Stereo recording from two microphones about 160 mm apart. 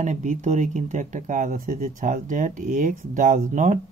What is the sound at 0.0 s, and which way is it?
Speech, 50° right (ahead or behind).